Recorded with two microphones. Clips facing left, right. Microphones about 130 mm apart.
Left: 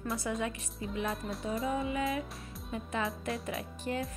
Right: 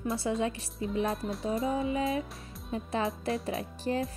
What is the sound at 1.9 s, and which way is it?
Speech, 30° right (ahead or behind).